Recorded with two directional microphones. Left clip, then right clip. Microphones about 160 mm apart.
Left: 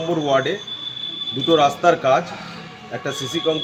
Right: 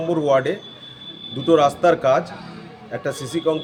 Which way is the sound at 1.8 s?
30° right (ahead or behind).